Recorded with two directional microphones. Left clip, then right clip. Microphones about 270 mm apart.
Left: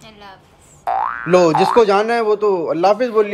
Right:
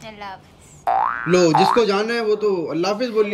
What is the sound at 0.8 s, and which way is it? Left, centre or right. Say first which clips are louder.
A man's voice: even; centre.